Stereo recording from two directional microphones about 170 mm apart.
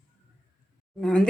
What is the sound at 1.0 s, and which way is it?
Speech, 5° left (ahead or behind).